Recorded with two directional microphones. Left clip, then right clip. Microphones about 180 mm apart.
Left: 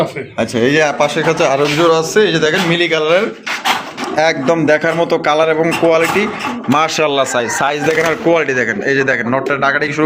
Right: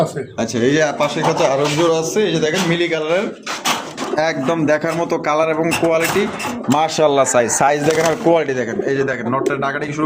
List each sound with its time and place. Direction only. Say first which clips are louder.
0.3 s a man's voice: left 4 dB; 10° left (ahead or behind)
6.8 s speech: even; 25° right (ahead or behind)
8.3 s speech: left 3 dB; 10° right (ahead or behind)
8.9 s a man's voice: left 5 dB; 10° left (ahead or behind)